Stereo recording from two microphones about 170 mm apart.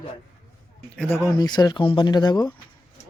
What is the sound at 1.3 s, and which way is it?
Speech, 25° left (ahead or behind).